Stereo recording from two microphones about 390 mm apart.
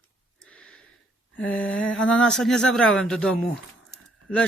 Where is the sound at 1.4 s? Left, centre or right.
Centre.